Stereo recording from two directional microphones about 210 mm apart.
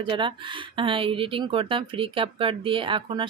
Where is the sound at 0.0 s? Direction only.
25° right (ahead or behind).